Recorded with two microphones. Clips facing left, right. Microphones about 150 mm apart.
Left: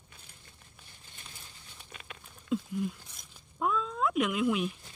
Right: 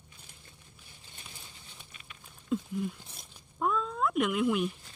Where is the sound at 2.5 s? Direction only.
Centre (ahead or behind).